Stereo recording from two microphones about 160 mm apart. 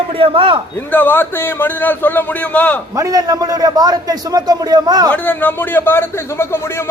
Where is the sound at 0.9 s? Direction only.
15° left (ahead or behind).